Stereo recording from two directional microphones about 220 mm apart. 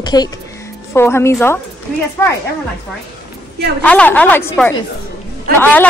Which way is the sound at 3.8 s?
5° left (ahead or behind).